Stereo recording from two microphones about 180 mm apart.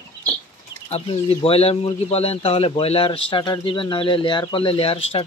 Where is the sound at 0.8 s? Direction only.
35° left (ahead or behind).